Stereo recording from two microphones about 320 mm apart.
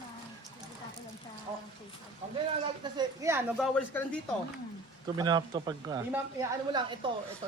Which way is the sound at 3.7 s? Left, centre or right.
Centre.